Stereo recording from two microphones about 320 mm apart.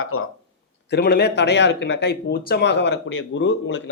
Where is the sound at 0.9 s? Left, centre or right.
Left.